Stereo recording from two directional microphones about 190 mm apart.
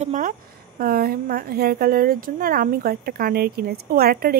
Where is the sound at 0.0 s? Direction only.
45° right (ahead or behind).